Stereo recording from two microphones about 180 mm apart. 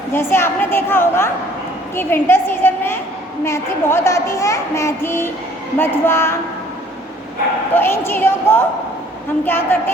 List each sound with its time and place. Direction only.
0.1 s a woman's voice: 15° left (ahead or behind)
2.0 s a sound: 10° left (ahead or behind)
3.4 s a woman's voice: 15° left (ahead or behind)
7.7 s a woman's voice: 10° left (ahead or behind)